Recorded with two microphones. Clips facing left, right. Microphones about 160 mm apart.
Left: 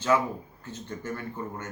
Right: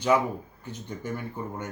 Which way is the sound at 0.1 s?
15° right (ahead or behind).